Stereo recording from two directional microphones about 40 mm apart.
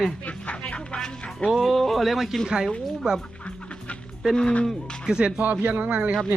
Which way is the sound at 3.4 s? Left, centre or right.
Left.